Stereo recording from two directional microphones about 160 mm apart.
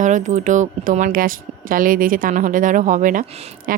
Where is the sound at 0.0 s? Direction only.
50° right (ahead or behind).